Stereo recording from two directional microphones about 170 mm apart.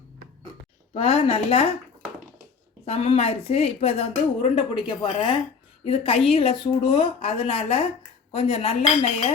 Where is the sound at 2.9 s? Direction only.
35° left (ahead or behind).